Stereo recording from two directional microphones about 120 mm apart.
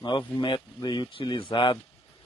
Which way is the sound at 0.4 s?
40° left (ahead or behind).